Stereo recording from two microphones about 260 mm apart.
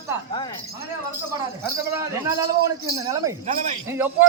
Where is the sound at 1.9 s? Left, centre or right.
Centre.